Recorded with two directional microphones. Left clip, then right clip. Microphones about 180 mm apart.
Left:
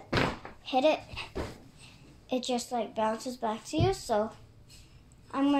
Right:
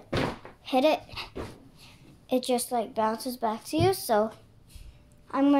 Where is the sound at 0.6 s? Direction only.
30° right (ahead or behind).